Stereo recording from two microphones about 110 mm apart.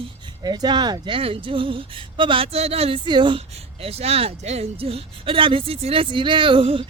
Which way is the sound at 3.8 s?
65° right (ahead or behind).